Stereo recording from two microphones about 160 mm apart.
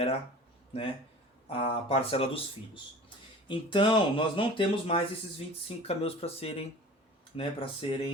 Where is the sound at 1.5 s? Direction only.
35° left (ahead or behind).